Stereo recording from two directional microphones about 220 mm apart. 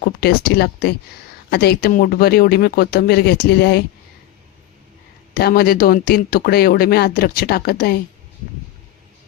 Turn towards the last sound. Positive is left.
turn(degrees=45)  # may be behind; listen again after turning